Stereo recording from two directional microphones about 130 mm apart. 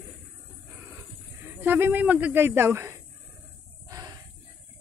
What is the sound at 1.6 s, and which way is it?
Speech, 15° right (ahead or behind).